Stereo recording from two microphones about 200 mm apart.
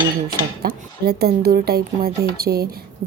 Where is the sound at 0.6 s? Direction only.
50° right (ahead or behind).